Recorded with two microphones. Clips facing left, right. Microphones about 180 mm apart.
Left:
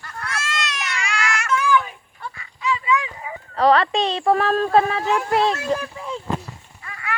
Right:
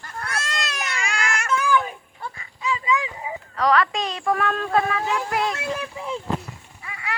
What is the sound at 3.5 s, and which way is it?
Speech, 30° left (ahead or behind).